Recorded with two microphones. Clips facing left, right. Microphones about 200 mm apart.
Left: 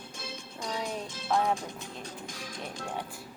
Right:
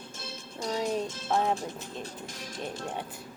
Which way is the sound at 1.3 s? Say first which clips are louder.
Even; 25° right (ahead or behind).